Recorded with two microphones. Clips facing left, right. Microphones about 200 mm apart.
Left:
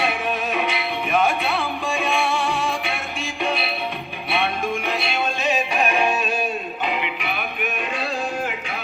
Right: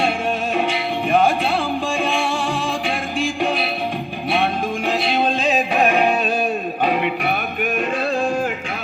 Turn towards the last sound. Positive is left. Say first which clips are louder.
# right 5 dB
turn(degrees=-45)  # may be behind; listen again after turning